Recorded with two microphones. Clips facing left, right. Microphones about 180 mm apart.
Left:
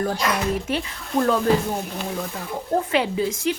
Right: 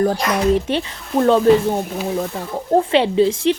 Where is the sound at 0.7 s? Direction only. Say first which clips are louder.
Right 5 dB; 30° right (ahead or behind).